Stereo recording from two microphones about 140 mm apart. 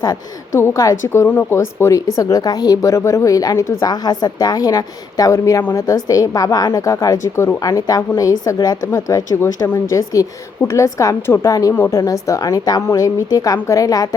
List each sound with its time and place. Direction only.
0.0 s speech: 25° left (ahead or behind)